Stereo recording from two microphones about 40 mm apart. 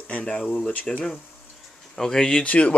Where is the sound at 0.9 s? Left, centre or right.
Left.